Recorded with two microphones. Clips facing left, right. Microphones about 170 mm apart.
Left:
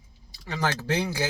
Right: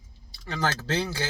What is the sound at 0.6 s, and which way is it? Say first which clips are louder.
Speech: left 1 dB; 15° left (ahead or behind).